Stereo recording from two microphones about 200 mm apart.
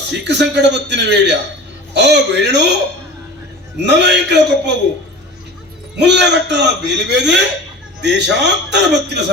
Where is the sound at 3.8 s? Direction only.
60° right (ahead or behind).